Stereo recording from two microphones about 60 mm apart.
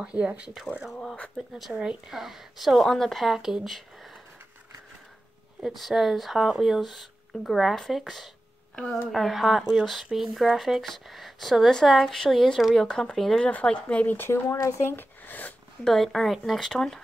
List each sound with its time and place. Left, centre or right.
0.0 s speech: centre
1.7 s speech: centre
5.6 s speech: centre
9.1 s speech: centre
13.5 s speech: left
14.0 s speech: left
15.8 s speech: centre